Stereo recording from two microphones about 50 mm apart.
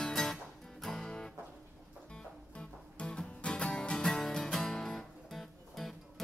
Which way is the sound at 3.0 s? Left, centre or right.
Centre.